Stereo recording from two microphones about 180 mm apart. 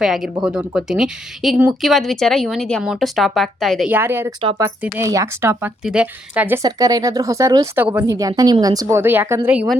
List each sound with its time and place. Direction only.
0.0 s a woman's voice: centre (ahead or behind)
3.8 s speech: 10° right (ahead or behind)
4.4 s a woman's voice: 25° right (ahead or behind)
4.6 s a woman's voice: 15° right (ahead or behind)